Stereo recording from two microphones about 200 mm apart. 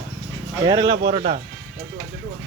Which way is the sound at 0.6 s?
20° right (ahead or behind).